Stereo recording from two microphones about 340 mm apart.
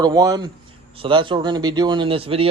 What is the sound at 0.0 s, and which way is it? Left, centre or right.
Speech, centre.